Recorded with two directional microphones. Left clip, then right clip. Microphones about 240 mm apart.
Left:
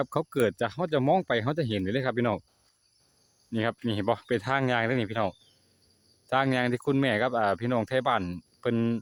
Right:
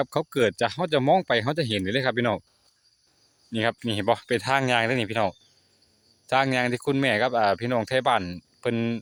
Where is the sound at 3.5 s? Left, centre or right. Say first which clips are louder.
Right 4 dB; centre.